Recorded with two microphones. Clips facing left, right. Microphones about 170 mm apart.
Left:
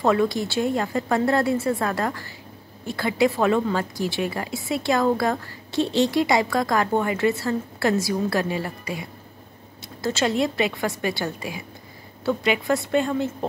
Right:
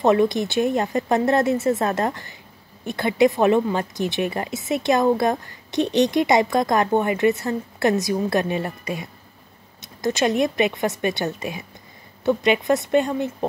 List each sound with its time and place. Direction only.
0.0 s a woman's voice: 20° right (ahead or behind)
10.0 s a woman's voice: 20° right (ahead or behind)